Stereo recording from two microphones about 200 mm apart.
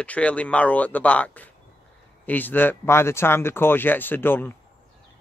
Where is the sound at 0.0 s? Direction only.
5° left (ahead or behind).